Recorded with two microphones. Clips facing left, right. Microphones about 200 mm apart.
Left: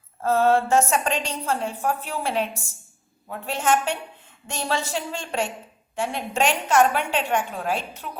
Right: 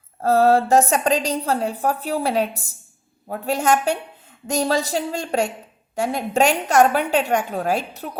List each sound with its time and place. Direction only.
0.2 s a woman's voice: 35° right (ahead or behind)